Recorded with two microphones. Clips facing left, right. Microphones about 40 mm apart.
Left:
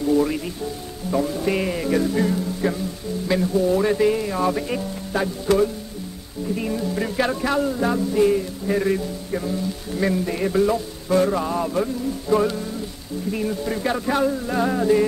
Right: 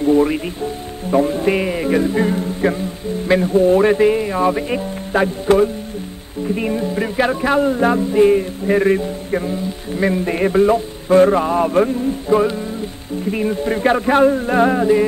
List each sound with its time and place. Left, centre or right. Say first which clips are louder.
0.0 s speech: right 5 dB; right
1.1 s music: right 6 dB; right
1.6 s speech: right 4 dB; right
6.4 s music: right 5 dB; right
12.3 s speech: right 4 dB; right
13.3 s music: right 6 dB; right
14.8 s speech: right 4 dB; right